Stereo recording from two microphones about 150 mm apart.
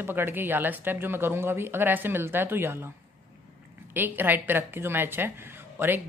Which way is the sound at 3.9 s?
15° right (ahead or behind).